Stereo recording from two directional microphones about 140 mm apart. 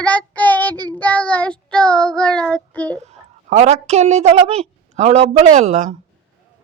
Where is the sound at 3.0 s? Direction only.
55° right (ahead or behind).